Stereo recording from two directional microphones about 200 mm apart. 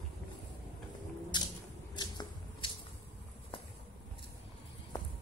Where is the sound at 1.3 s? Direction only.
20° left (ahead or behind).